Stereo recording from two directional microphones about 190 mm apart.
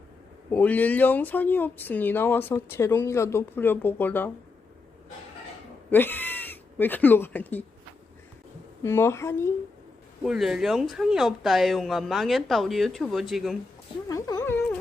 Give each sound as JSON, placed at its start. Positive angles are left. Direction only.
{"t": 0.5, "sound": "speech", "side_deg": 10}
{"t": 5.9, "sound": "speech", "side_deg": 10}
{"t": 8.8, "sound": "speech", "side_deg": 15}
{"t": 10.2, "sound": "speech", "side_deg": -5}
{"t": 14.1, "sound": "speech", "side_deg": 20}